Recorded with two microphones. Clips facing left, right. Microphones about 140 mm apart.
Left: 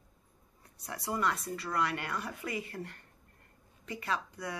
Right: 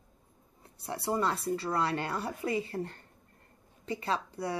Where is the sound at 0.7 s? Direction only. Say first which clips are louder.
Right 4 dB; 30° right (ahead or behind).